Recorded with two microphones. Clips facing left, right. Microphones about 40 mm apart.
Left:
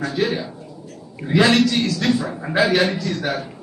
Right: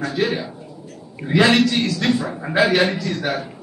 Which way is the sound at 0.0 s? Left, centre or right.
Centre.